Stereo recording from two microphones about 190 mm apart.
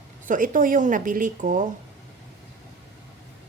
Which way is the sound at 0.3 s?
45° right (ahead or behind).